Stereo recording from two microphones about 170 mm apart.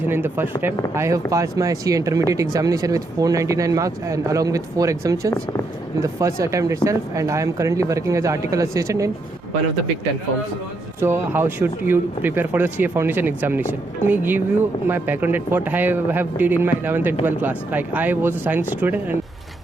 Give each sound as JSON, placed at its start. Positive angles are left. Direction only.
{"t": 0.0, "sound": "speech", "side_deg": -15}
{"t": 11.0, "sound": "speech", "side_deg": -15}